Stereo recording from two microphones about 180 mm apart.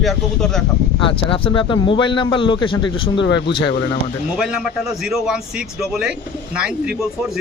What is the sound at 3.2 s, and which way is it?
Speech, 80° left.